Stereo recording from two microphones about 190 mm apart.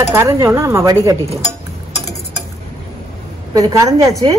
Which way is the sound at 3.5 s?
15° right (ahead or behind).